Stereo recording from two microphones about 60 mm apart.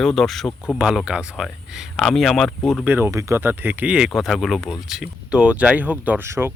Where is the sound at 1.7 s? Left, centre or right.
Centre.